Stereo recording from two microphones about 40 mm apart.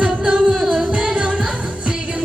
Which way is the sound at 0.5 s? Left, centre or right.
Centre.